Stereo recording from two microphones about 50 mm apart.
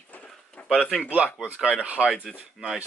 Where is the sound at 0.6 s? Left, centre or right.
Left.